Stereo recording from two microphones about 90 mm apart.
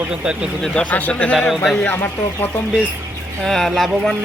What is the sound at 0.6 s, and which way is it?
Speech, 10° left (ahead or behind).